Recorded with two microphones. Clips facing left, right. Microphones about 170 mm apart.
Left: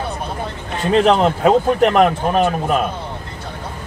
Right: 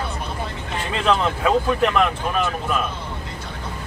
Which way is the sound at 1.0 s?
40° left (ahead or behind).